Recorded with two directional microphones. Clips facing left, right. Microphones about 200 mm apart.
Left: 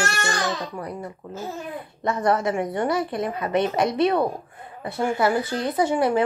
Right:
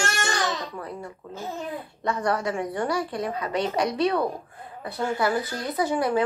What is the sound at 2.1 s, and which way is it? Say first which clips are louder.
A woman's voice: left 4 dB; 25° left (ahead or behind).